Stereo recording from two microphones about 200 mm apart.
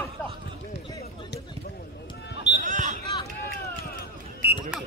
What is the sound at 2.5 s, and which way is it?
Basketball bounce, 40° right (ahead or behind).